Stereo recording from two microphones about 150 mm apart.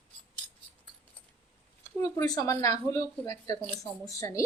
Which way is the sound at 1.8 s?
20° left (ahead or behind).